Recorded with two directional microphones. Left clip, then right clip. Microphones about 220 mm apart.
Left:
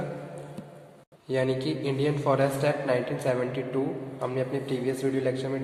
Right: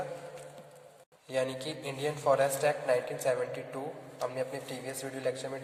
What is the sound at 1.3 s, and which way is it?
A man's voice, 25° right (ahead or behind).